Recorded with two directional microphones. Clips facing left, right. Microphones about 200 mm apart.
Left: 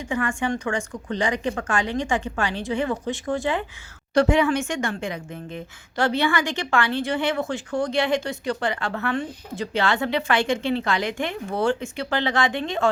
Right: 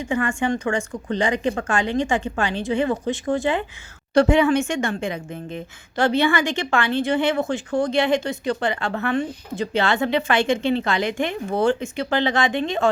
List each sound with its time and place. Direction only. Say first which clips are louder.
0.0 s a woman's voice: right 3 dB; 25° right (ahead or behind)